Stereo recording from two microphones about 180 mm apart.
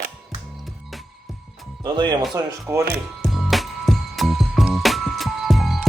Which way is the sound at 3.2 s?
Centre (ahead or behind).